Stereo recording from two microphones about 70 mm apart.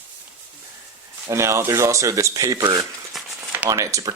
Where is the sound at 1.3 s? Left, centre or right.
Right.